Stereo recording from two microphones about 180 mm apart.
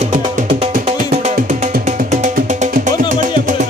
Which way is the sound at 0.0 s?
45° right (ahead or behind).